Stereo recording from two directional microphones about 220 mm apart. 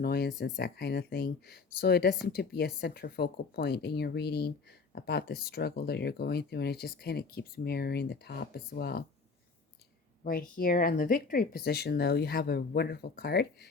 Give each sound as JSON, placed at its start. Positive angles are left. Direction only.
{"t": 0.0, "sound": "speech", "side_deg": 45}
{"t": 10.6, "sound": "speech", "side_deg": 40}